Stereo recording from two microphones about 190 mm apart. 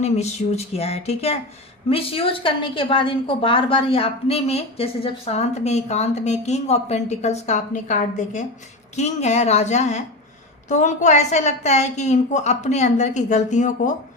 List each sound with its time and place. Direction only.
0.0 s a woman's voice: 35° left (ahead or behind)